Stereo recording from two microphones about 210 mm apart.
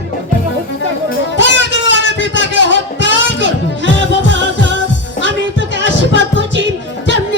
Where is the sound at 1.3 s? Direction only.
60° left (ahead or behind).